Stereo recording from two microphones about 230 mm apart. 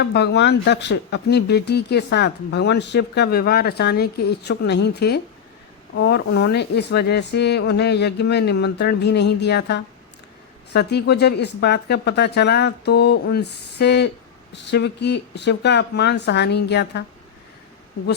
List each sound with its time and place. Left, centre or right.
0.0 s speech: left